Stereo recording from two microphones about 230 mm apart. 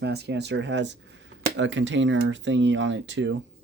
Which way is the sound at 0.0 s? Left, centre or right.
Right.